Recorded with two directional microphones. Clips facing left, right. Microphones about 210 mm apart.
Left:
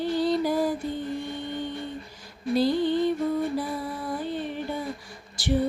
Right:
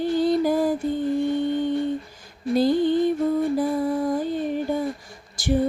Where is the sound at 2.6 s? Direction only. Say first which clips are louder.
Right 4 dB; 50° right (ahead or behind).